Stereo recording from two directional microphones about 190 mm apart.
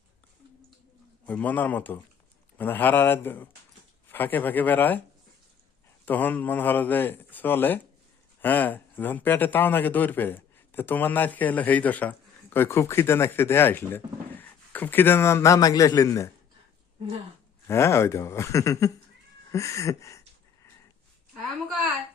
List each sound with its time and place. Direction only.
1.2 s speech: 10° left (ahead or behind)
6.1 s speech: 10° left (ahead or behind)
17.7 s speech: 15° left (ahead or behind)
19.5 s a sound: 15° left (ahead or behind)